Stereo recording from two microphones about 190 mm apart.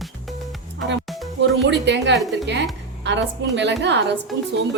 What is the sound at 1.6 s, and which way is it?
A woman's voice, 65° right (ahead or behind).